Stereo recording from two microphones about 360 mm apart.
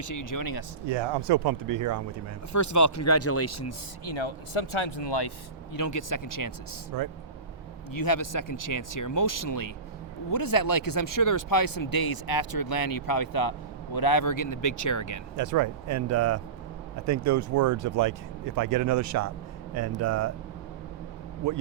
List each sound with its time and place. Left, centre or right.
0.0 s speech: left
1.3 s speech: right
2.5 s speech: left
4.9 s speech: left
5.7 s speech: left
6.9 s speech: right
7.9 s speech: left
15.4 s speech: right
21.4 s speech: right